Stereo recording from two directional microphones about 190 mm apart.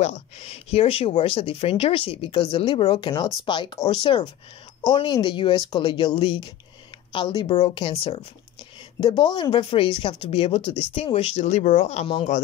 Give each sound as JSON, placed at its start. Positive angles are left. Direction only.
{"t": 0.0, "sound": "speech", "side_deg": 35}